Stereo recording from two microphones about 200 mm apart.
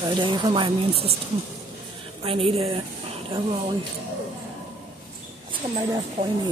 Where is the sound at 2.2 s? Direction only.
25° right (ahead or behind).